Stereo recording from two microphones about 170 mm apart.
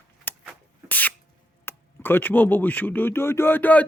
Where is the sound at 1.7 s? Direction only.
10° left (ahead or behind).